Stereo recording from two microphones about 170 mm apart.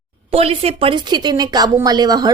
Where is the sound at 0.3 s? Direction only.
35° right (ahead or behind).